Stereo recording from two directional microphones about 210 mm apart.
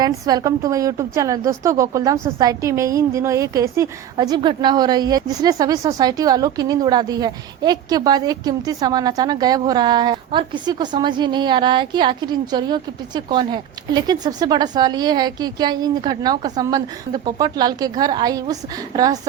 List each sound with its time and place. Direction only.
0.0 s a woman's voice: 20° right (ahead or behind)